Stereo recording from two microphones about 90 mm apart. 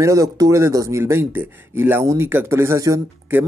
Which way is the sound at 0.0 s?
40° right (ahead or behind).